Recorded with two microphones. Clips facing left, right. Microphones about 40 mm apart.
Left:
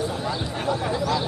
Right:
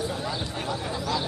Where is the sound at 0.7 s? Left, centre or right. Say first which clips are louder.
Left 6 dB; centre.